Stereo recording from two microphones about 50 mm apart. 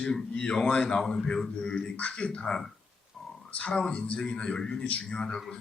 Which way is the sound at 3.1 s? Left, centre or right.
Centre.